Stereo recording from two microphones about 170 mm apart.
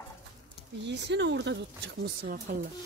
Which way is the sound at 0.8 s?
90° right.